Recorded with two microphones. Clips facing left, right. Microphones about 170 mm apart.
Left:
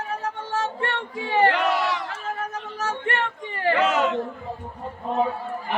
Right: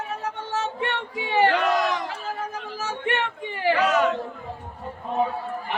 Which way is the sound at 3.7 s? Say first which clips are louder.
Even; 25° left (ahead or behind).